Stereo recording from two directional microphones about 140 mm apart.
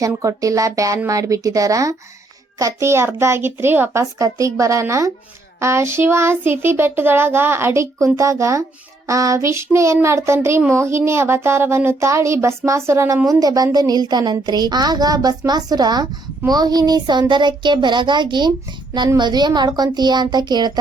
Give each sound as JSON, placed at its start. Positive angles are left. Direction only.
{"t": 0.0, "sound": "a child's voice", "side_deg": -25}